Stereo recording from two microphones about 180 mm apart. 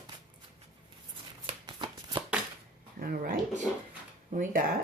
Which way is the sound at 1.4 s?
25° right (ahead or behind).